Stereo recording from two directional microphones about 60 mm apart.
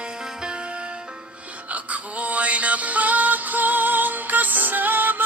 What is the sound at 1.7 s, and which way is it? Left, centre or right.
Music, right.